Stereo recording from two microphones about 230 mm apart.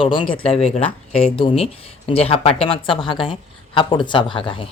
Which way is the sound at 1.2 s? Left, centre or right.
Left.